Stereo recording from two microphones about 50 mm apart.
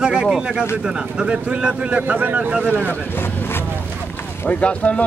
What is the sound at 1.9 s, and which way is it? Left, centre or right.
Speech, right.